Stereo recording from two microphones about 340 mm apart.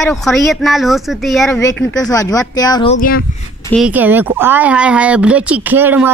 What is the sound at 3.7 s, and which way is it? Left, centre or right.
A woman's voice, centre.